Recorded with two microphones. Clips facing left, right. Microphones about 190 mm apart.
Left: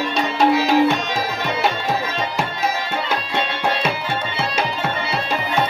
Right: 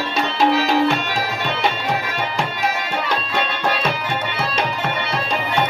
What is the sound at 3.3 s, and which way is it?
Music, 25° left (ahead or behind).